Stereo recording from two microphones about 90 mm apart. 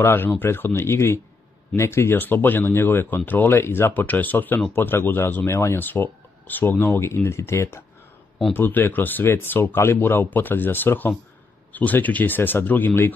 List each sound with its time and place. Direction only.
0.0 s speech: 25° left (ahead or behind)